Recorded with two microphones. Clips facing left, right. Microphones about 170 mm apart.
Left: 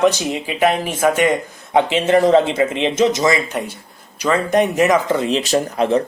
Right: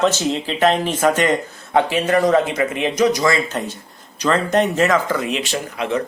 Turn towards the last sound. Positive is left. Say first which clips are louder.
# left 6 dB
turn(degrees=35)  # may be behind; listen again after turning